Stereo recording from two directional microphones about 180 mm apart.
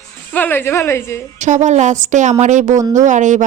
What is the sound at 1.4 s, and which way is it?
Speech, 40° right (ahead or behind).